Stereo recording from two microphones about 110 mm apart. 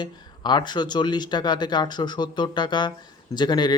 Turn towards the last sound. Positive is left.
turn(degrees=40)  # may be behind; listen again after turning